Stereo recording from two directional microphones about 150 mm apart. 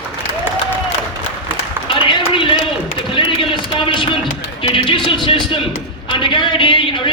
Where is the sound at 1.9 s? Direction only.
35° left (ahead or behind).